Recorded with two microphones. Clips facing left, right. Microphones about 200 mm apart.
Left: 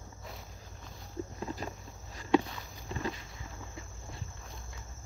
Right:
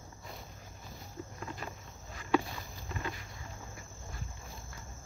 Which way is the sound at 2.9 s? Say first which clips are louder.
Left 4 dB; 30° left (ahead or behind).